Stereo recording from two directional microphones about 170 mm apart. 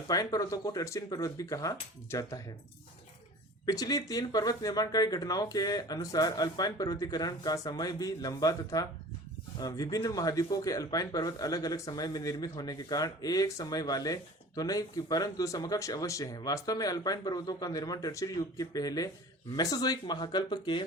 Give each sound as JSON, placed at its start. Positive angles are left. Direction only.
{"t": 0.1, "sound": "speech", "side_deg": 20}
{"t": 3.7, "sound": "speech", "side_deg": 20}